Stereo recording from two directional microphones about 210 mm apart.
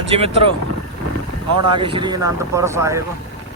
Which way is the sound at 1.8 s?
25° right (ahead or behind).